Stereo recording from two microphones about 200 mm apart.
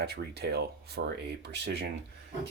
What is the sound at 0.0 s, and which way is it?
Speech, 55° right (ahead or behind).